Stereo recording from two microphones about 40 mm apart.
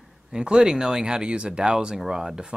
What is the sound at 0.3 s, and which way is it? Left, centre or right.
Speech, centre.